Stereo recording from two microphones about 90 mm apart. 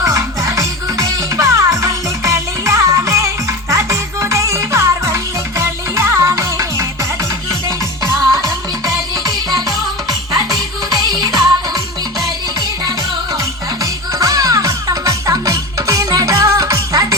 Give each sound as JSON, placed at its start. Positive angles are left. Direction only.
{"t": 0.0, "sound": "music", "side_deg": -35}
{"t": 8.4, "sound": "music", "side_deg": -40}
{"t": 14.1, "sound": "music", "side_deg": -40}